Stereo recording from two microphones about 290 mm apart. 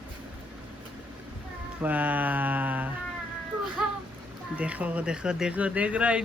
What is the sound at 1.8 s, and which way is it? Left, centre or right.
Speech, centre.